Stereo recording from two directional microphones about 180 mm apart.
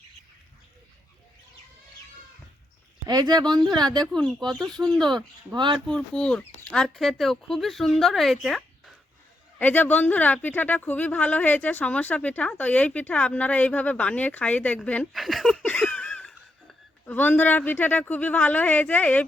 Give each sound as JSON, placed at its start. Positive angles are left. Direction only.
{"t": 3.1, "sound": "speech", "side_deg": -20}
{"t": 3.8, "sound": "speech", "side_deg": 5}
{"t": 5.5, "sound": "speech", "side_deg": -25}
{"t": 5.9, "sound": "speech", "side_deg": 5}